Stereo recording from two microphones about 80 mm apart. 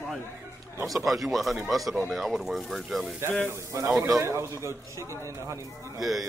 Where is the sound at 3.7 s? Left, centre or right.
Right.